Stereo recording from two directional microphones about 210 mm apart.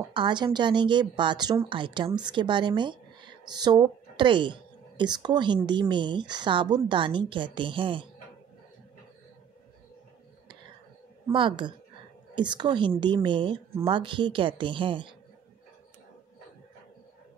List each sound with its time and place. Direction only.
0.1 s speech: 20° right (ahead or behind)
11.3 s speech: 20° right (ahead or behind)